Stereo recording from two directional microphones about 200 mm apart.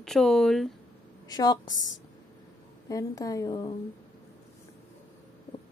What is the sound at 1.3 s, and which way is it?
Speech, 20° left (ahead or behind).